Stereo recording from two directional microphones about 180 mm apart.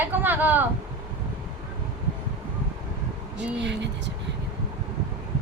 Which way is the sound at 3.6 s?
75° right (ahead or behind).